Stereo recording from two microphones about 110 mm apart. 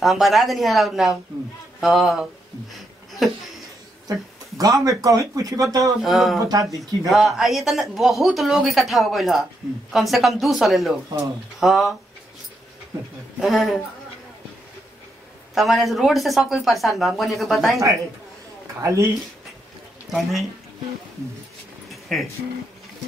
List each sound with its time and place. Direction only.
0.0 s speech: centre (ahead or behind)
4.1 s speech: 35° right (ahead or behind)
6.0 s speech: centre (ahead or behind)
6.4 s speech: 35° right (ahead or behind)
7.1 s speech: centre (ahead or behind)
13.4 s speech: centre (ahead or behind)
15.5 s speech: centre (ahead or behind)
18.8 s speech: 25° right (ahead or behind)
20.1 s speech: centre (ahead or behind)
22.1 s speech: centre (ahead or behind)